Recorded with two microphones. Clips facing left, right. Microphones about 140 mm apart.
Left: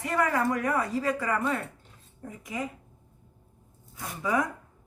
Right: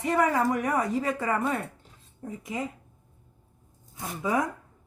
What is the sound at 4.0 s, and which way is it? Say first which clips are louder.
Speech: right 1 dB; 25° right (ahead or behind).